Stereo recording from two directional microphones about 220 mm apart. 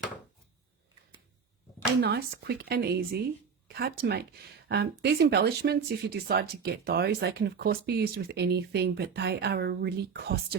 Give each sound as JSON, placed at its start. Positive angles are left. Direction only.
{"t": 2.0, "sound": "speech", "side_deg": -45}